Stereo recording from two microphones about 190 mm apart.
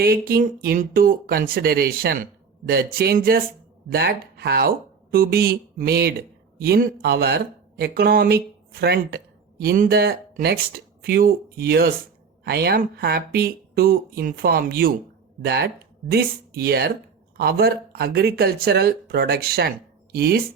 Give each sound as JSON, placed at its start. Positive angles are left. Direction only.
{"t": 0.0, "sound": "speech", "side_deg": -50}